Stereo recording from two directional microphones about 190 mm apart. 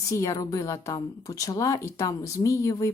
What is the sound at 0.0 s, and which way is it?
A woman's voice, 15° left (ahead or behind).